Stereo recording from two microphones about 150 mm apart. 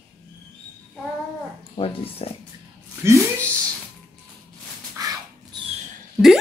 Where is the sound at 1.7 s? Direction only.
40° left (ahead or behind).